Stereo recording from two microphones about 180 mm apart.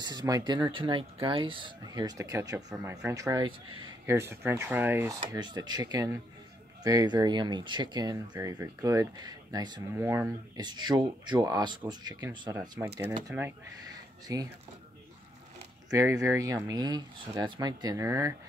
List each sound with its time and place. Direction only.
0.0 s speech: 20° right (ahead or behind)
9.9 s speech: 15° right (ahead or behind)
15.9 s speech: 15° right (ahead or behind)